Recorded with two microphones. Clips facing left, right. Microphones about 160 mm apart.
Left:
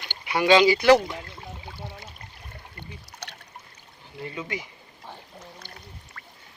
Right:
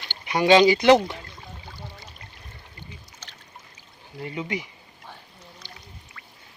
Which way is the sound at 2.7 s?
65° left (ahead or behind).